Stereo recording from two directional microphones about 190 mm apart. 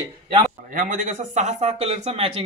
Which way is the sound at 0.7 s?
45° right (ahead or behind).